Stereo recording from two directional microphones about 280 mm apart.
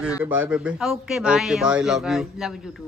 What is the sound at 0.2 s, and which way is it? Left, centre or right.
A man's voice, centre.